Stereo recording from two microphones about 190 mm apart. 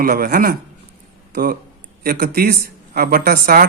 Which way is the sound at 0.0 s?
50° right (ahead or behind).